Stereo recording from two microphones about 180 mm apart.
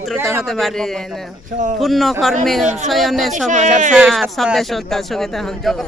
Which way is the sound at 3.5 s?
45° right (ahead or behind).